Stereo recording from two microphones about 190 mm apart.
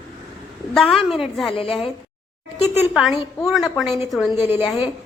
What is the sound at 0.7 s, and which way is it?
Speech, centre (ahead or behind).